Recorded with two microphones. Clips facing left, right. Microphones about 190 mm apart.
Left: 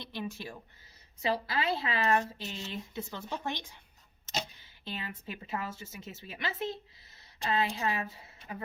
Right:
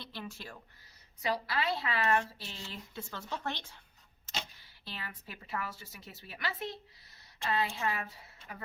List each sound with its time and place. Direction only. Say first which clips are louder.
0.0 s a woman's voice: left 5 dB; 15° left (ahead or behind)
4.9 s a woman's voice: left 5 dB; 25° left (ahead or behind)